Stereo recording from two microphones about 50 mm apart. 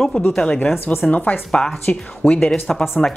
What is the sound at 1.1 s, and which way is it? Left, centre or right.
Speech, left.